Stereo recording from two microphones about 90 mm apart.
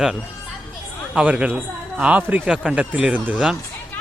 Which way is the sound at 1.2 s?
15° right (ahead or behind).